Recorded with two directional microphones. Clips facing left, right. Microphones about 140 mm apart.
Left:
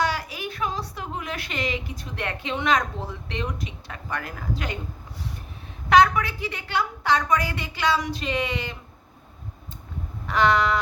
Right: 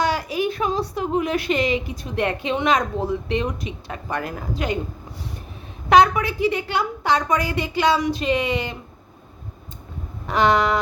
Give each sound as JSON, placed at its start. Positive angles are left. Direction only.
{"t": 0.0, "sound": "a woman's voice", "side_deg": -20}
{"t": 5.9, "sound": "a woman's voice", "side_deg": -15}
{"t": 10.2, "sound": "a woman's voice", "side_deg": -15}